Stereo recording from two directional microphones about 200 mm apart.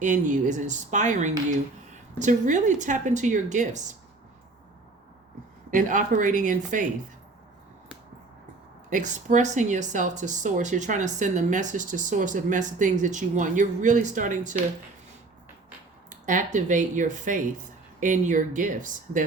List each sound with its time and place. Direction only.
0.0 s speech: 40° right (ahead or behind)
5.7 s speech: 40° right (ahead or behind)
8.9 s speech: 40° right (ahead or behind)
16.0 s speech: 40° right (ahead or behind)